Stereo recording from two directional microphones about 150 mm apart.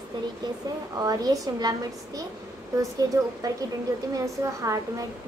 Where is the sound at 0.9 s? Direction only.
25° right (ahead or behind).